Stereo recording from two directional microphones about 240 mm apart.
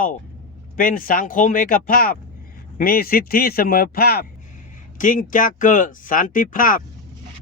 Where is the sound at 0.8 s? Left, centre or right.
Left.